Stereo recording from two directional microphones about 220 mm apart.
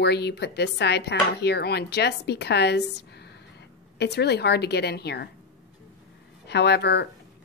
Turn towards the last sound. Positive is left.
turn(degrees=50)  # may be behind; listen again after turning